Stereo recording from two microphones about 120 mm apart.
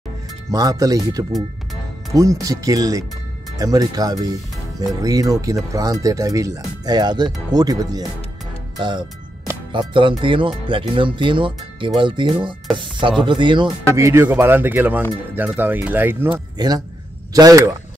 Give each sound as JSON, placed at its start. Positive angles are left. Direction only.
{"t": 0.5, "sound": "speech", "side_deg": -30}
{"t": 13.9, "sound": "speech", "side_deg": -25}
{"t": 16.5, "sound": "a man's voice", "side_deg": -35}